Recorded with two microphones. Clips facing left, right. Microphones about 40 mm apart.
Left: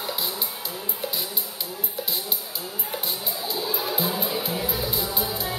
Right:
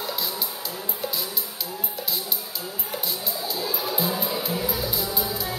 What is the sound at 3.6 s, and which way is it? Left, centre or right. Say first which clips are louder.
Music: even; centre.